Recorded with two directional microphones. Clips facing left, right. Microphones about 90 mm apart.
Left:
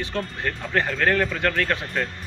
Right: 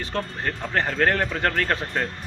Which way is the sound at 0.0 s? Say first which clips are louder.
Even; 35° right (ahead or behind).